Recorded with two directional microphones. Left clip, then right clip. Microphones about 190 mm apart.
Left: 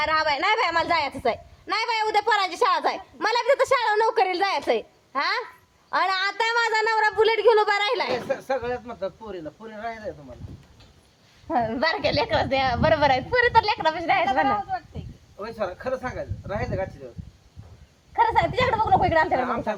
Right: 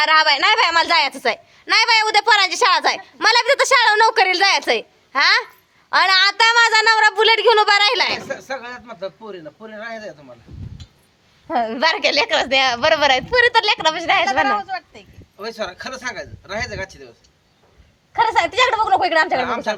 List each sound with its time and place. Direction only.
0.0 s a woman's voice: 10° right (ahead or behind)
8.3 s a man's voice: 60° left (ahead or behind)
11.4 s a woman's voice: 35° right (ahead or behind)
15.4 s speech: 55° left (ahead or behind)
18.1 s a woman's voice: 20° right (ahead or behind)